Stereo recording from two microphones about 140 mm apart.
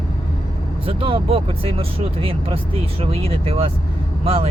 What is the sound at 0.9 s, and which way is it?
Speech, 40° right (ahead or behind).